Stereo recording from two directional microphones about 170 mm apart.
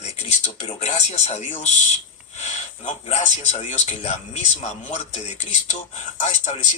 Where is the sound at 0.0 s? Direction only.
40° left (ahead or behind).